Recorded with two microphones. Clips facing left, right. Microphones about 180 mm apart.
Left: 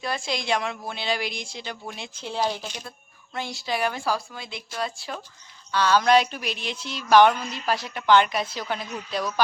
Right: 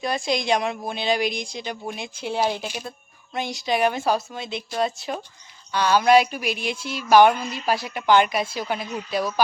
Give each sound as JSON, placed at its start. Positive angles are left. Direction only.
{"t": 0.0, "sound": "a woman's voice", "side_deg": -15}